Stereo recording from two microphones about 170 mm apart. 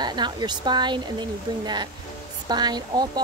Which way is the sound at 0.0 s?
25° right (ahead or behind).